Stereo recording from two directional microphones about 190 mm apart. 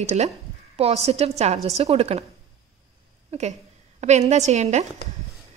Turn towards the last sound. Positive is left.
turn(degrees=-35)  # may be behind; listen again after turning